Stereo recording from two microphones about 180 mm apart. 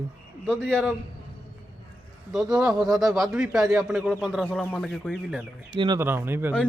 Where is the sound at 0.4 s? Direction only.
5° left (ahead or behind).